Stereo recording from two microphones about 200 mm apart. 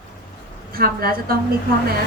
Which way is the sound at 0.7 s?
50° right (ahead or behind).